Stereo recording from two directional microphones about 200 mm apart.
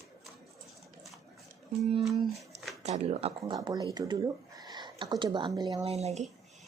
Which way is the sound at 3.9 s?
20° right (ahead or behind).